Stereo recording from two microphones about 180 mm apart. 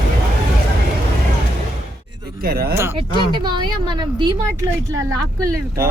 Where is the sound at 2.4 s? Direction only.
55° right (ahead or behind).